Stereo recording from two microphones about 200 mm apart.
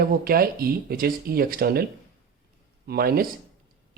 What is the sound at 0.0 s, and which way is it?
Speech, 50° right (ahead or behind).